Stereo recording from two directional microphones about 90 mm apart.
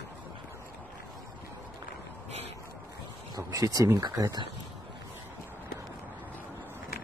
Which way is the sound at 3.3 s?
40° right (ahead or behind).